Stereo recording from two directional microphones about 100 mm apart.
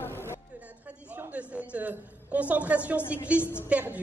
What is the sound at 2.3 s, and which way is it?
A woman's voice, 15° right (ahead or behind).